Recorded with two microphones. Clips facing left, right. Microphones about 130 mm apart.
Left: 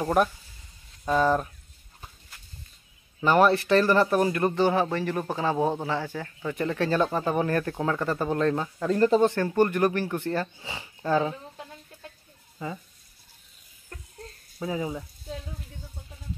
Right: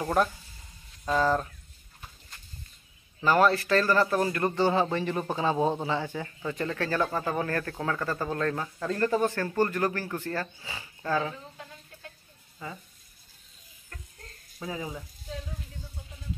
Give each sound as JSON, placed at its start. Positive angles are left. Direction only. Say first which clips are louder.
{"t": 0.0, "sound": "a sound", "louder": "left 3 dB", "side_deg": 15}
{"t": 3.3, "sound": "speech", "louder": "left 3 dB", "side_deg": 20}
{"t": 4.9, "sound": "speech", "louder": "left 1 dB", "side_deg": -15}
{"t": 6.5, "sound": "speech", "louder": "left 5 dB", "side_deg": 15}
{"t": 14.7, "sound": "speech", "louder": "left 5 dB", "side_deg": 20}